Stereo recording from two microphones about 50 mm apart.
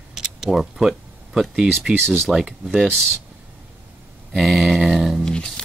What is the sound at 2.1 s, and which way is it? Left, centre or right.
Speech, centre.